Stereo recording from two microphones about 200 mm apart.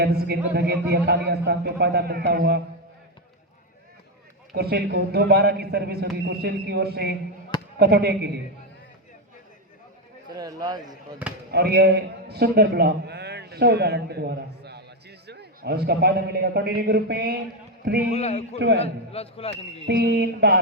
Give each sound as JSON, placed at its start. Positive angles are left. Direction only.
{"t": 0.0, "sound": "a man's voice", "side_deg": -55}
{"t": 4.5, "sound": "a man's voice", "side_deg": -50}
{"t": 10.2, "sound": "a man's voice", "side_deg": -20}
{"t": 11.5, "sound": "a man's voice", "side_deg": -55}
{"t": 18.1, "sound": "a man's voice", "side_deg": 30}
{"t": 19.9, "sound": "a man's voice", "side_deg": -55}